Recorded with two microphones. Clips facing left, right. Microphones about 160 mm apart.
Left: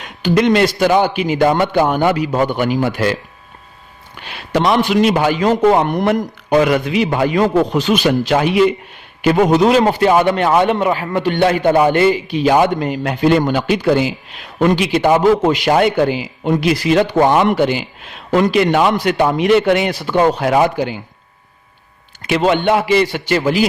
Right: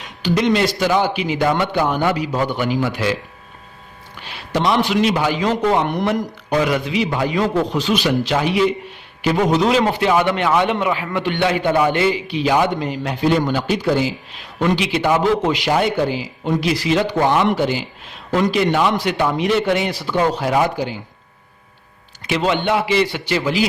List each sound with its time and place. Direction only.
0.0 s a sound: 55° left (ahead or behind)
0.8 s a man's voice: 55° left (ahead or behind)
4.2 s a man's voice: 65° left (ahead or behind)
15.8 s speech: 65° left (ahead or behind)
22.2 s a man's voice: 50° left (ahead or behind)